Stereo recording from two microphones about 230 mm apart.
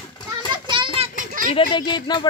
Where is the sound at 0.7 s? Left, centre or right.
Right.